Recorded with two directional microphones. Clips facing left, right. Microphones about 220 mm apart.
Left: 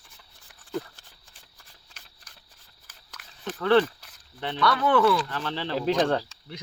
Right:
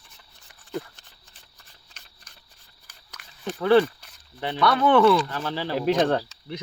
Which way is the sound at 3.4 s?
10° right (ahead or behind).